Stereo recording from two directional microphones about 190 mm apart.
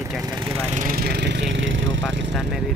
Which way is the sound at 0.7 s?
45° right (ahead or behind).